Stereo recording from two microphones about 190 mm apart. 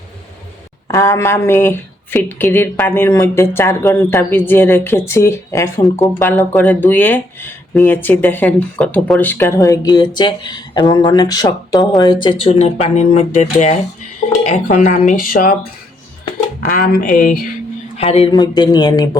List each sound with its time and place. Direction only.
0.9 s speech: 15° left (ahead or behind); by 17.4 s 45° left (ahead or behind)
17.9 s speech: 30° left (ahead or behind)